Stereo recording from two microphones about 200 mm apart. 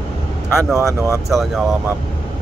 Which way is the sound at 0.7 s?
15° right (ahead or behind).